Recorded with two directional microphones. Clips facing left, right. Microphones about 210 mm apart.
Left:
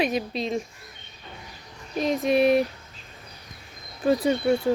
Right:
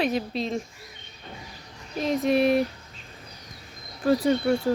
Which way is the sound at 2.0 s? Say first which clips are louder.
Left 1 dB; 20° left (ahead or behind).